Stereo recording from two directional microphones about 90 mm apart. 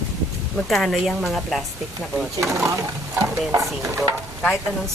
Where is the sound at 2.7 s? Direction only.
35° right (ahead or behind).